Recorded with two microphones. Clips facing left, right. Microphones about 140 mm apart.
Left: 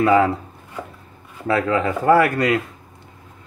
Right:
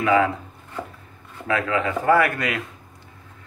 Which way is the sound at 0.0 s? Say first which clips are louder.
Left 3 dB; 35° left (ahead or behind).